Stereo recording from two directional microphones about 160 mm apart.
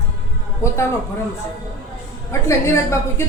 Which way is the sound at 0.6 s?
15° left (ahead or behind).